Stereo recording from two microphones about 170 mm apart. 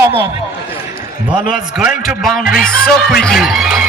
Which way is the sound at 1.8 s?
Centre (ahead or behind).